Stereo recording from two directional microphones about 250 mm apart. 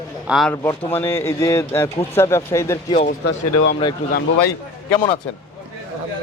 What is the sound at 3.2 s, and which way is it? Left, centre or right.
Speech, left.